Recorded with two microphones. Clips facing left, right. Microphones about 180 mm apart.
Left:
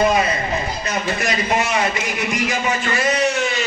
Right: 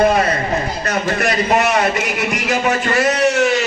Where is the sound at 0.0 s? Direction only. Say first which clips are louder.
Right 3 dB; 55° right (ahead or behind).